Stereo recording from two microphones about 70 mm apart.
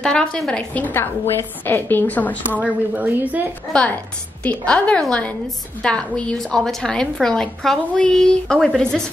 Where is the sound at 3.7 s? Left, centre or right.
Centre.